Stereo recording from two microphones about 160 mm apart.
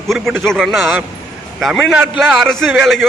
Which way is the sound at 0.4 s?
Centre (ahead or behind).